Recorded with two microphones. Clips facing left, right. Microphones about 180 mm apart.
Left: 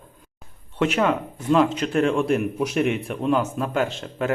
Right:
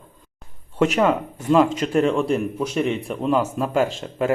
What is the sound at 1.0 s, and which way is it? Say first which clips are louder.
Speech: right 2 dB; 5° right (ahead or behind).